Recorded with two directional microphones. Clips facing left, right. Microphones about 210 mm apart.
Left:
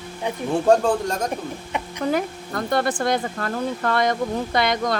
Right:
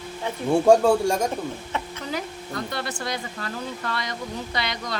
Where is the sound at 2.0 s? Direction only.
50° left (ahead or behind).